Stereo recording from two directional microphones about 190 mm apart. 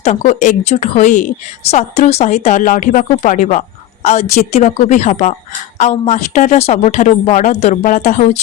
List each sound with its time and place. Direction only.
0.0 s a woman's voice: 35° left (ahead or behind)